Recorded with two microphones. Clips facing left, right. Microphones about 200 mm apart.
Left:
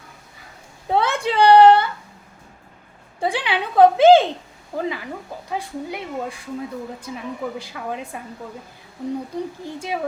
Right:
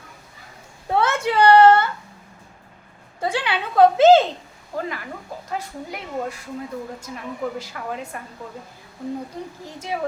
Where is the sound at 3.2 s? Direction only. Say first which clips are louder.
Left 1 dB; 15° left (ahead or behind).